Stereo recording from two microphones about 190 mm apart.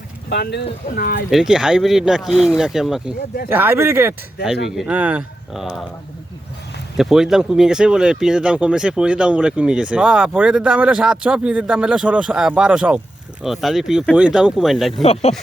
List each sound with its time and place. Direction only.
0.3 s speech: 60° left (ahead or behind)
1.3 s speech: 5° right (ahead or behind)
6.9 s speech: centre (ahead or behind)
15.0 s speech: 35° left (ahead or behind)